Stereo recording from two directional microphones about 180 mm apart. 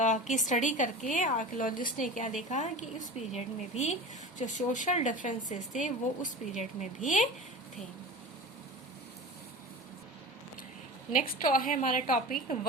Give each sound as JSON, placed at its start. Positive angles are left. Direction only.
{"t": 0.0, "sound": "a woman's voice", "side_deg": 40}
{"t": 11.2, "sound": "a woman's voice", "side_deg": 50}